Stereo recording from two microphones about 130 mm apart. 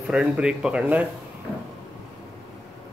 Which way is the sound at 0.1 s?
5° right (ahead or behind).